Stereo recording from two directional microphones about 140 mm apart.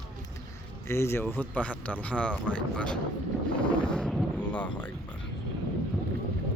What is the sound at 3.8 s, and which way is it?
Boat, 5° left (ahead or behind).